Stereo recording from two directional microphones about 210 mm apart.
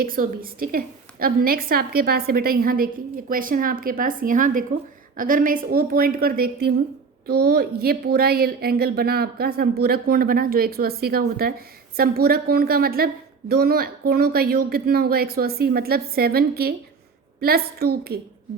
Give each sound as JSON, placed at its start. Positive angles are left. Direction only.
{"t": 0.0, "sound": "a woman's voice", "side_deg": -45}